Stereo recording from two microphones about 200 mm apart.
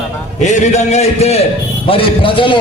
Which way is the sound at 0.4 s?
35° left (ahead or behind).